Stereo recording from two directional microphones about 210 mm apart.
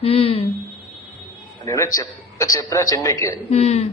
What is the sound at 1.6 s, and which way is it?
A man's voice, 15° left (ahead or behind).